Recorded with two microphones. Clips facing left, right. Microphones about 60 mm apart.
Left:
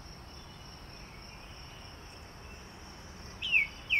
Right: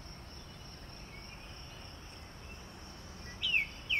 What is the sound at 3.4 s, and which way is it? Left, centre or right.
Bird, left.